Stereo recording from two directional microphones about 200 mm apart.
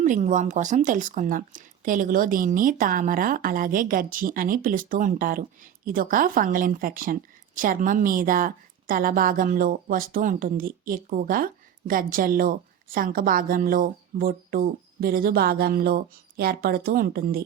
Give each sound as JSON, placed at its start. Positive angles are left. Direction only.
{"t": 0.0, "sound": "a woman's voice", "side_deg": -40}